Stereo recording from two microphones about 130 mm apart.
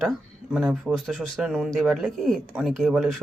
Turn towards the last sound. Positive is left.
turn(degrees=0)  # may be behind; listen again after turning